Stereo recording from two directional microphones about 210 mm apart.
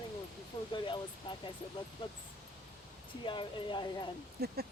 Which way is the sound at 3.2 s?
20° left (ahead or behind).